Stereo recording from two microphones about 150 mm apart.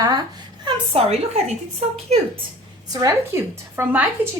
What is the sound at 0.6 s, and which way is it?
Speech, 40° right (ahead or behind).